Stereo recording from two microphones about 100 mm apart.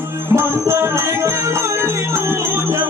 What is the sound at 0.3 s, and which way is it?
Music, 25° right (ahead or behind).